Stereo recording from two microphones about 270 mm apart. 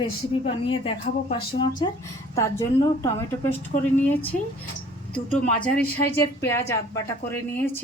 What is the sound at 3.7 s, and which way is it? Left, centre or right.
Speech, left.